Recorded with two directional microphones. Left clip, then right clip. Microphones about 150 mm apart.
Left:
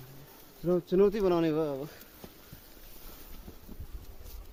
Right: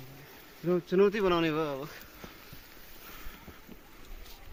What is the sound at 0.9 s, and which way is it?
Speech, 45° left (ahead or behind).